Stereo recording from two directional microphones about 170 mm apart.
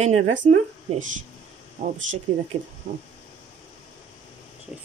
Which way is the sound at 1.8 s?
50° right (ahead or behind).